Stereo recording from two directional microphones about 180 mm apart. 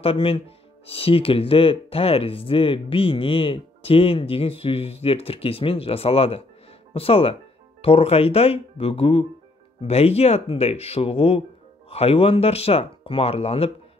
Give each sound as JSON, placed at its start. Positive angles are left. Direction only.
{"t": 0.0, "sound": "speech", "side_deg": 30}